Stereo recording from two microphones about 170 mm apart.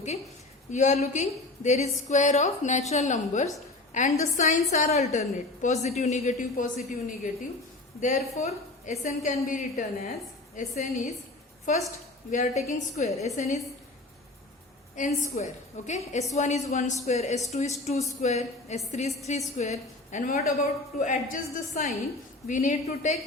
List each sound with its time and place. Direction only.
0.7 s a woman's voice: 45° left (ahead or behind)
8.0 s a woman's voice: 45° left (ahead or behind)
14.9 s a woman's voice: 45° left (ahead or behind)